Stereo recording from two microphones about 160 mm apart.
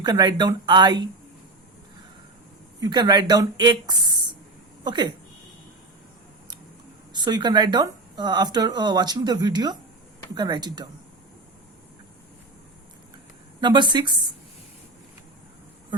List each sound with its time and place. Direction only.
0.0 s speech: 25° right (ahead or behind)
2.8 s speech: 25° right (ahead or behind)
7.1 s speech: 25° right (ahead or behind)
13.6 s speech: 30° right (ahead or behind)